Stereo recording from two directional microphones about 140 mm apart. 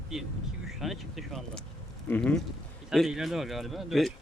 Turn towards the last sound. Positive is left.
turn(degrees=0)  # may be behind; listen again after turning